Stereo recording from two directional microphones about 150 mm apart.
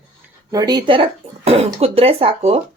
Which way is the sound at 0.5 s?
25° right (ahead or behind).